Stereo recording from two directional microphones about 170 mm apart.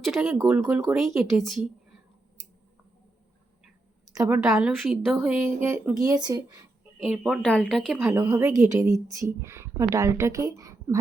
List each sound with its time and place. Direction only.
0.0 s speech: centre (ahead or behind)
0.3 s speech: 15° right (ahead or behind)
0.8 s speech: centre (ahead or behind)
2.4 s a sound: 45° right (ahead or behind)
4.1 s a woman's voice: 20° right (ahead or behind)
4.5 s speech: centre (ahead or behind); by 6.7 s 20° right (ahead or behind)
7.0 s speech: centre (ahead or behind)
8.0 s a woman's voice: 15° right (ahead or behind)